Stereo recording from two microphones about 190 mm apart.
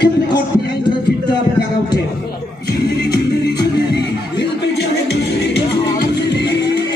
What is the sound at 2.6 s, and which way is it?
Music, 55° left (ahead or behind).